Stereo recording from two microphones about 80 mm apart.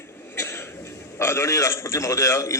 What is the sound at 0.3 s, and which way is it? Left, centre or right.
Cough, left.